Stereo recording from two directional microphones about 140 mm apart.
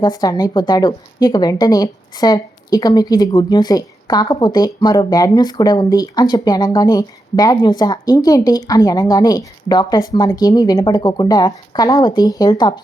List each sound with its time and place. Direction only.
0.0 s a woman's voice: 25° left (ahead or behind)